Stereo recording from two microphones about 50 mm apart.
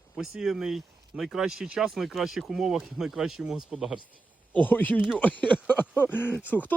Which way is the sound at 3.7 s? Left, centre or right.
Centre.